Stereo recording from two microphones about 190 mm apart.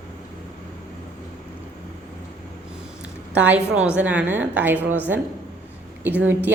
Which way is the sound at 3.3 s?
10° right (ahead or behind).